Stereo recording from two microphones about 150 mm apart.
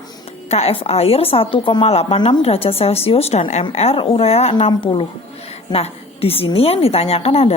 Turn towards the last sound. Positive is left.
turn(degrees=40)  # may be behind; listen again after turning